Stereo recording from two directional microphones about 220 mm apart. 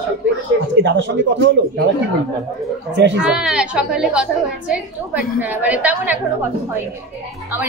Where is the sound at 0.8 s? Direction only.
55° right (ahead or behind).